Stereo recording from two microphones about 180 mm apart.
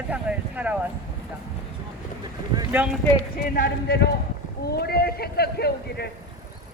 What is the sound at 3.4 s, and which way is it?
A man's voice, 55° left (ahead or behind).